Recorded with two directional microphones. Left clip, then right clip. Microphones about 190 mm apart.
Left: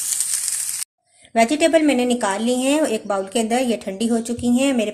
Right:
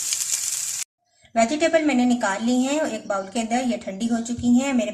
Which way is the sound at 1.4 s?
45° left (ahead or behind).